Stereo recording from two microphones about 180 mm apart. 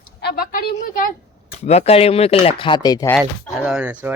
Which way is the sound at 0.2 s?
60° left (ahead or behind).